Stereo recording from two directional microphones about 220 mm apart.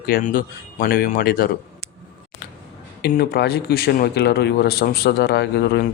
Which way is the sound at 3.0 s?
45° left (ahead or behind).